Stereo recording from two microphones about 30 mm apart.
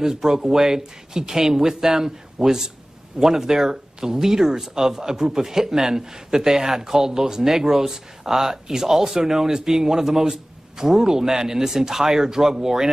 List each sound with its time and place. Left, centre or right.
0.0 s speech: centre